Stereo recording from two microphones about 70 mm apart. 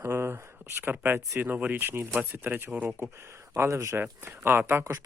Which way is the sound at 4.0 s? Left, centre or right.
Right.